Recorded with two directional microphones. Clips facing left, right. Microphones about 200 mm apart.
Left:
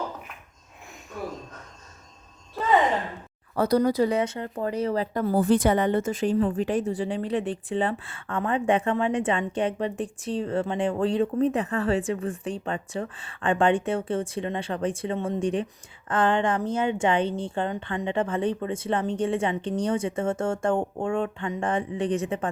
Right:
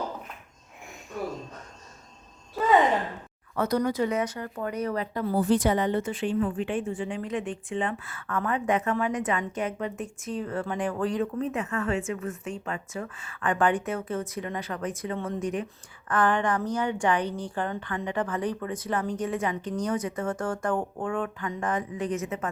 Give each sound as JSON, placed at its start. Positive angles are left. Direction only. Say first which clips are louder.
{"t": 2.6, "sound": "a sound", "louder": "right 2 dB", "side_deg": 0}
{"t": 3.5, "sound": "a woman's voice", "louder": "left 4 dB", "side_deg": 35}
{"t": 5.1, "sound": "a woman's voice", "louder": "left 2 dB", "side_deg": 50}